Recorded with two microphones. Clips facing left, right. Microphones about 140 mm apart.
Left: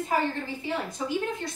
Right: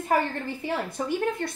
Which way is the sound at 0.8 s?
60° right (ahead or behind).